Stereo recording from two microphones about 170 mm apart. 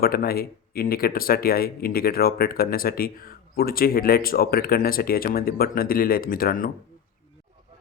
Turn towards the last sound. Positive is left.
turn(degrees=55)  # may be behind; listen again after turning